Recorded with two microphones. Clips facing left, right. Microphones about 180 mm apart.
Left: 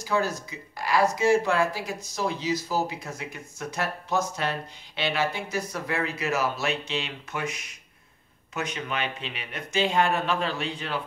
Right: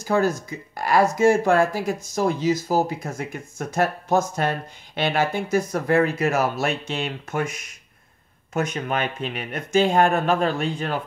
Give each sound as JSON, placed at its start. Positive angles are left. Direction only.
{"t": 0.0, "sound": "speech", "side_deg": -50}